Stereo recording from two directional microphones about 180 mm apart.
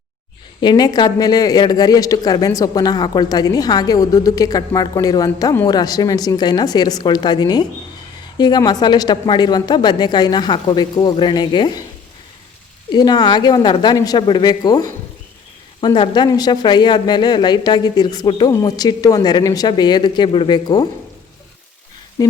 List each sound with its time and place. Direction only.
0.6 s speech: 25° left (ahead or behind)
12.9 s speech: 25° left (ahead or behind)
22.2 s speech: 20° left (ahead or behind)